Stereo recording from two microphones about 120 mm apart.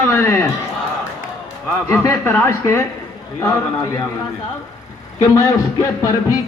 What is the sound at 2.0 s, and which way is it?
A man's voice, 20° left (ahead or behind).